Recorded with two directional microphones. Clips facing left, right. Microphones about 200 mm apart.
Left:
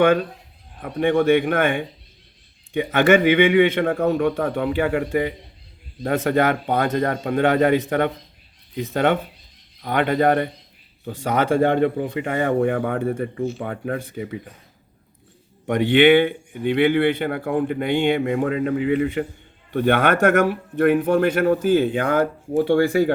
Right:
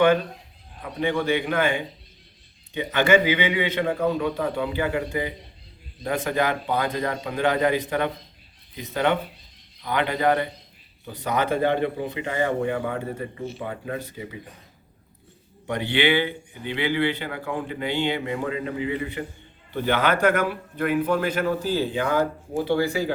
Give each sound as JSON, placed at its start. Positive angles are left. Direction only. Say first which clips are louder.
{"t": 0.8, "sound": "a man's voice", "louder": "left 6 dB", "side_deg": 55}
{"t": 2.9, "sound": "a man's voice", "louder": "left 4 dB", "side_deg": 55}
{"t": 11.9, "sound": "a man's voice", "louder": "left 3 dB", "side_deg": 50}
{"t": 15.6, "sound": "a man's voice", "louder": "left 8 dB", "side_deg": 55}